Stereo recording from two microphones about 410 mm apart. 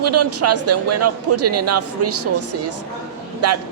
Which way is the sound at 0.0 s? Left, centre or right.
Right.